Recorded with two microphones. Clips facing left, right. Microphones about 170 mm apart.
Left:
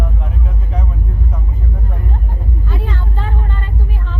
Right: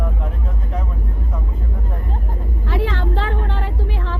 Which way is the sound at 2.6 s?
90° right.